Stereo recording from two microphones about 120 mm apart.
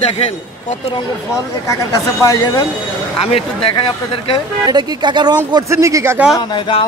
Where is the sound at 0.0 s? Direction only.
60° left (ahead or behind).